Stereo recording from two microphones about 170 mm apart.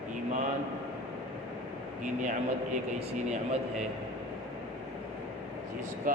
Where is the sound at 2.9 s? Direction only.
35° right (ahead or behind).